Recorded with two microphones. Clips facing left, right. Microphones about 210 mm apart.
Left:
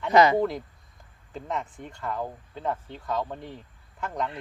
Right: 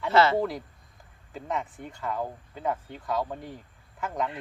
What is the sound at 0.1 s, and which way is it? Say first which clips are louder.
Speech: left 3 dB; 15° left (ahead or behind).